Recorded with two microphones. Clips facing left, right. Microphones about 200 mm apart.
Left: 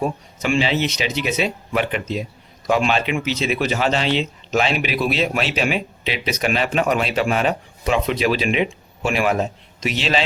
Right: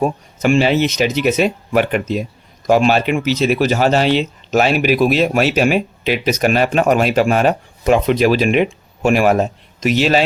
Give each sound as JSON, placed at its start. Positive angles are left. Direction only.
{"t": 0.0, "sound": "speech", "side_deg": -45}